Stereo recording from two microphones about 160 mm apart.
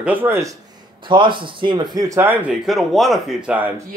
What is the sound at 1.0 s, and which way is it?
Speech, 30° right (ahead or behind).